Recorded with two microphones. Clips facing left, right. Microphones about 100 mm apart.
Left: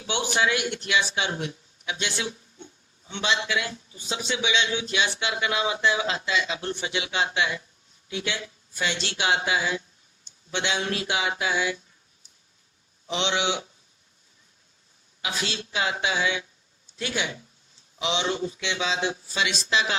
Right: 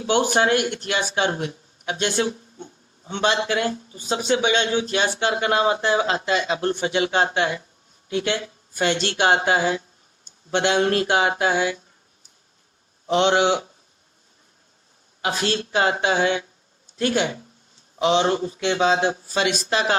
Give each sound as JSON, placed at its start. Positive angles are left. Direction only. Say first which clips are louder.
{"t": 0.0, "sound": "speech", "louder": "right 6 dB", "side_deg": -45}
{"t": 13.1, "sound": "speech", "louder": "right 9 dB", "side_deg": -50}
{"t": 15.2, "sound": "speech", "louder": "right 8 dB", "side_deg": -50}